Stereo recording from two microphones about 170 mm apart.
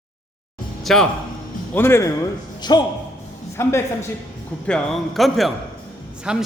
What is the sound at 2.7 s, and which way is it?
A man's voice, 25° left (ahead or behind).